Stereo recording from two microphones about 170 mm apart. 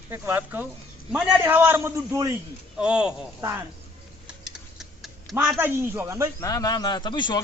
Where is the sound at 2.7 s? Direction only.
5° right (ahead or behind).